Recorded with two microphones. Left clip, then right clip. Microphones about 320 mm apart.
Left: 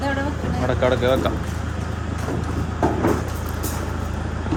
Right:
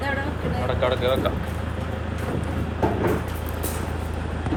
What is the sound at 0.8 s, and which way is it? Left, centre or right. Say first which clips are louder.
Speech: left 3 dB; centre.